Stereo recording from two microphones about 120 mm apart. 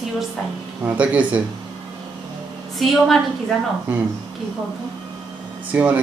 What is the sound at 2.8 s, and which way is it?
Speech, centre (ahead or behind).